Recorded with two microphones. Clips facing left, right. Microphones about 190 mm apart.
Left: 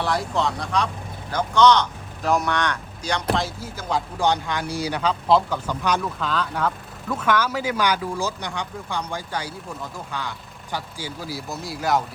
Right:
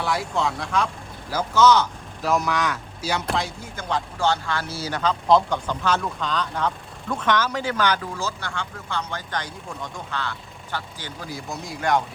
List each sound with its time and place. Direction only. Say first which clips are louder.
0.0 s speech: left 1 dB; centre (ahead or behind)
4.2 s speech: left 1 dB; 15° left (ahead or behind)